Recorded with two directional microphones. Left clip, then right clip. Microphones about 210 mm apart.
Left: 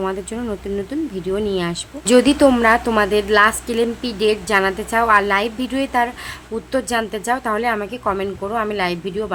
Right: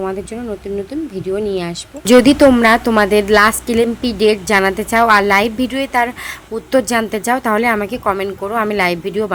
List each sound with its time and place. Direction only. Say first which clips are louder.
0.0 s speech: right 1 dB; centre (ahead or behind); by 9.3 s 15° right (ahead or behind)